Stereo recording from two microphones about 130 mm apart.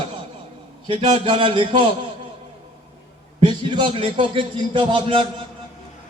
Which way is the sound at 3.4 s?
35° right (ahead or behind).